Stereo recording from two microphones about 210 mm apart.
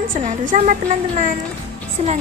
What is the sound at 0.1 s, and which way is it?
Speech, 40° right (ahead or behind).